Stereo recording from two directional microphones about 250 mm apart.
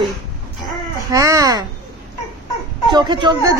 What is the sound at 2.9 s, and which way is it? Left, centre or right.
Speech, centre.